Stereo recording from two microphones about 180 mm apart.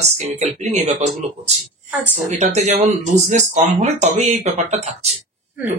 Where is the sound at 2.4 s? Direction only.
40° right (ahead or behind).